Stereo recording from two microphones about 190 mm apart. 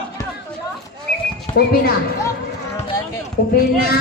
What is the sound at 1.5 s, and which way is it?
Speech, 55° left (ahead or behind).